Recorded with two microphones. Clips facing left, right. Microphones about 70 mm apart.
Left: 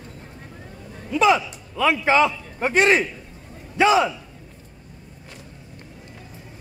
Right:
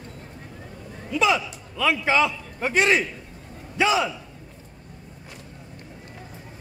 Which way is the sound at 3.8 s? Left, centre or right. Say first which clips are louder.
Left 4 dB; left.